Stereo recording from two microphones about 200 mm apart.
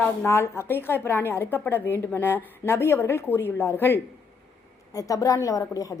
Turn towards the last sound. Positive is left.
turn(degrees=15)  # may be behind; listen again after turning